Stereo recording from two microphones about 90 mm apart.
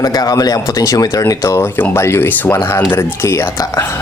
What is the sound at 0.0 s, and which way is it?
A man's voice, 45° left (ahead or behind).